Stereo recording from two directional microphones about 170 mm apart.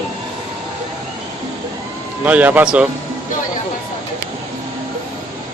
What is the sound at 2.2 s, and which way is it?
Speech, 10° right (ahead or behind).